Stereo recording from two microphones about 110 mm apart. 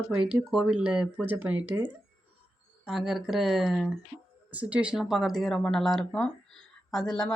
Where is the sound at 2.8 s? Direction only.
5° right (ahead or behind).